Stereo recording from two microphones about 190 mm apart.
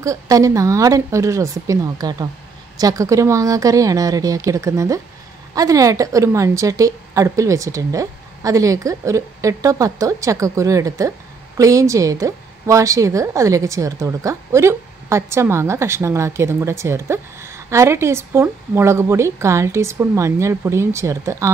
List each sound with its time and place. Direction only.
0.0 s a woman's voice: 15° right (ahead or behind)